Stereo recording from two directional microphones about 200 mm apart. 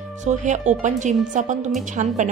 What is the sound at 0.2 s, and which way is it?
A woman's voice, 35° right (ahead or behind).